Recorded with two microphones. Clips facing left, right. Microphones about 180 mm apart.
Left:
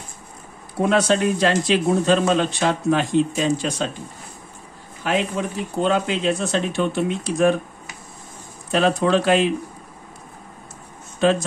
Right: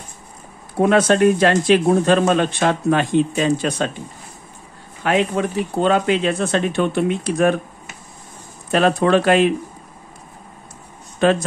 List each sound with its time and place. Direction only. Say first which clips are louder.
0.7 s speech: right 4 dB; 55° right (ahead or behind)
5.0 s speech: right 4 dB; 60° right (ahead or behind)
8.7 s speech: right 3 dB; 55° right (ahead or behind)
11.2 s speech: right 2 dB; 60° right (ahead or behind)